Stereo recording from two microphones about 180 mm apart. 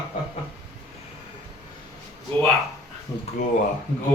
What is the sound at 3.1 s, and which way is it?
Speech, 15° left (ahead or behind).